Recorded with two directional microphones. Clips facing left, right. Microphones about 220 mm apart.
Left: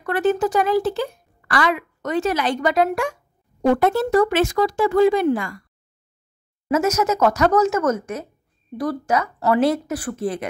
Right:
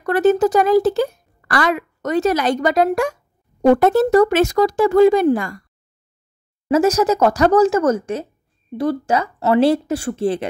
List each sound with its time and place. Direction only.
0.0 s a woman's voice: 40° right (ahead or behind)
6.7 s speech: 35° right (ahead or behind)